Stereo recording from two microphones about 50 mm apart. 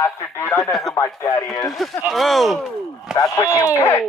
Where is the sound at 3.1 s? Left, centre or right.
Centre.